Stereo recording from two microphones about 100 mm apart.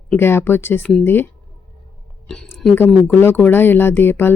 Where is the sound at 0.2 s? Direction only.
25° left (ahead or behind).